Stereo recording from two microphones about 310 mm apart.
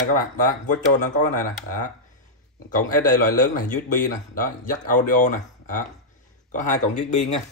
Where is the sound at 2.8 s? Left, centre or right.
Left.